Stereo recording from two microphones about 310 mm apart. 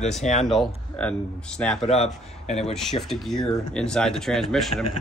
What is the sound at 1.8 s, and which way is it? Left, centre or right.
Speech, centre.